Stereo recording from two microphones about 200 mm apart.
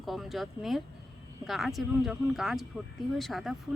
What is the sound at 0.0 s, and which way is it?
Speech, centre (ahead or behind).